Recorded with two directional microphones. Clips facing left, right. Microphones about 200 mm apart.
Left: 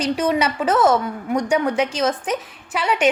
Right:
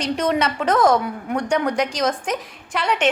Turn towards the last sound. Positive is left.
turn(degrees=5)  # may be behind; listen again after turning